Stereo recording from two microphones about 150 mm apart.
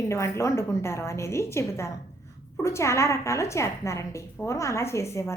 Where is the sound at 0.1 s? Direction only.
20° left (ahead or behind).